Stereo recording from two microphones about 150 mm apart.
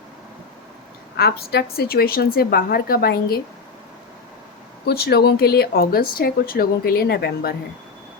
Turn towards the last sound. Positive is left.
turn(degrees=90)